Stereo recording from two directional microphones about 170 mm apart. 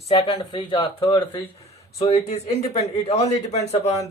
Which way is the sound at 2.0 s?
40° left (ahead or behind).